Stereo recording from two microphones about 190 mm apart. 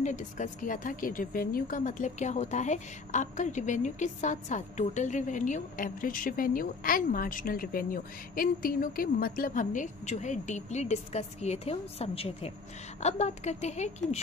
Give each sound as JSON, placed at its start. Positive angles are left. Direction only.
{"t": 0.0, "sound": "a woman's voice", "side_deg": 40}